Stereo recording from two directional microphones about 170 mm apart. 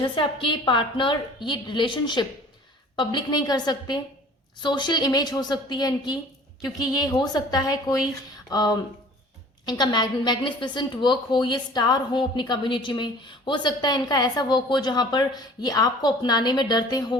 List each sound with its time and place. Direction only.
0.2 s a woman's voice: 30° left (ahead or behind)